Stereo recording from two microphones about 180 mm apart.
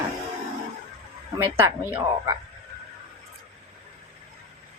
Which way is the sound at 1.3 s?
10° right (ahead or behind).